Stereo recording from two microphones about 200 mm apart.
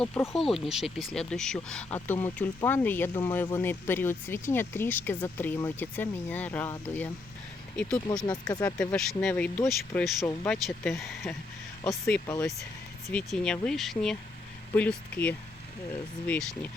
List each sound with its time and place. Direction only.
0.0 s speech: 5° left (ahead or behind)
8.3 s speech: 20° left (ahead or behind)
8.6 s speech: 5° left (ahead or behind)